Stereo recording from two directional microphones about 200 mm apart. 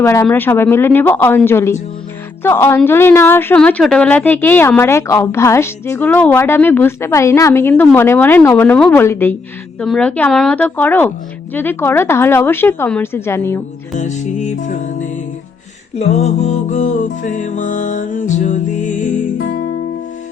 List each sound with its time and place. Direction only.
0.0 s a woman's voice: 15° left (ahead or behind)
13.9 s music: 40° left (ahead or behind)
19.5 s music: 50° left (ahead or behind)